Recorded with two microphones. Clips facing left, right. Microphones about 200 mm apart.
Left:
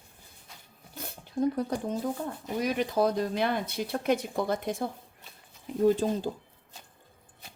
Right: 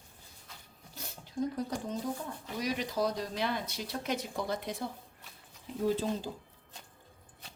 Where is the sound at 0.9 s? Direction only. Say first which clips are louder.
Left 5 dB; 55° left (ahead or behind).